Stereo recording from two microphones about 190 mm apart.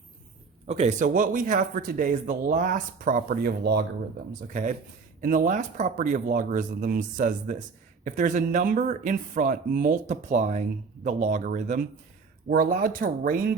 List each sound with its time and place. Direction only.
0.7 s a man's voice: 35° right (ahead or behind); by 3.8 s 60° right (ahead or behind)
4.3 s a man's voice: 45° right (ahead or behind)